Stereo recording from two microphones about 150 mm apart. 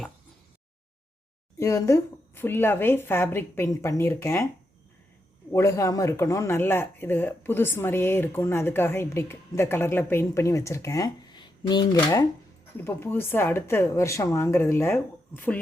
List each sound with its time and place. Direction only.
1.5 s speech: 20° left (ahead or behind)
5.5 s speech: 15° left (ahead or behind)
12.7 s speech: 15° left (ahead or behind)